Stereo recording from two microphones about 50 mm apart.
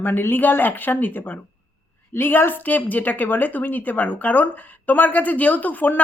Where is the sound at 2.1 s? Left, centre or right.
Left.